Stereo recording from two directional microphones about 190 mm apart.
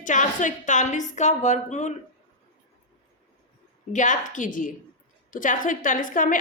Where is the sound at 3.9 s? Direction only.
40° left (ahead or behind).